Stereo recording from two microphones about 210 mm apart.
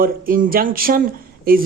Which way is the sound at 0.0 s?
40° right (ahead or behind).